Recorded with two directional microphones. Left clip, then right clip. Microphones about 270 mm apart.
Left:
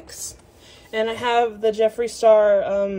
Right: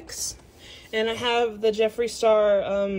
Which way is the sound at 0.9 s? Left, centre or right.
Centre.